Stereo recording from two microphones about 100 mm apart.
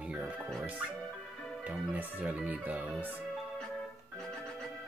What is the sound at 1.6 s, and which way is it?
Speech, 10° right (ahead or behind).